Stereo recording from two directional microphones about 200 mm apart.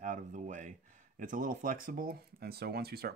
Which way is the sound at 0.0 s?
40° right (ahead or behind).